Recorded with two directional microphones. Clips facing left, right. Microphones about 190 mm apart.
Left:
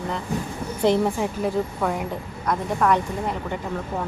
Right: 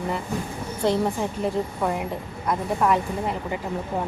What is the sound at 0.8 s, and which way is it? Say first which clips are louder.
Speech: left 3 dB; 15° left (ahead or behind).